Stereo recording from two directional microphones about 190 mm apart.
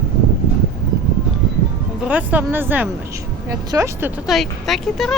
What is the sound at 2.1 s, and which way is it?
Speech, 10° right (ahead or behind).